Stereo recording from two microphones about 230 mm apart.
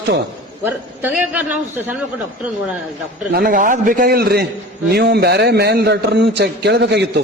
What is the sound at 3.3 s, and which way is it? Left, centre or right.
A man's voice, right.